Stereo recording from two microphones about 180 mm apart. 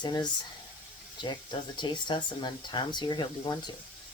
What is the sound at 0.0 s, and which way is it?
Speech, 25° left (ahead or behind).